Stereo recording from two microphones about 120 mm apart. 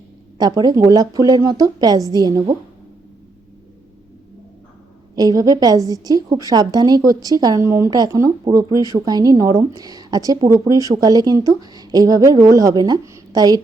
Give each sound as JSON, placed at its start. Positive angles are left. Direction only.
{"t": 0.3, "sound": "speech", "side_deg": -35}
{"t": 5.1, "sound": "speech", "side_deg": -30}